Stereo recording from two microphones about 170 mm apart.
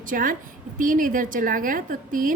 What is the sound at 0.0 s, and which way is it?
A woman's voice, 50° right (ahead or behind).